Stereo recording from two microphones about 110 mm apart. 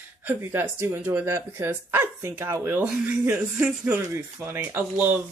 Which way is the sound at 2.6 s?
15° right (ahead or behind).